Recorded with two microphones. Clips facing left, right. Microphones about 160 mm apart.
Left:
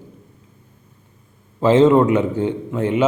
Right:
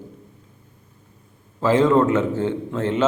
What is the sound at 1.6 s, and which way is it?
A man's voice, 20° left (ahead or behind).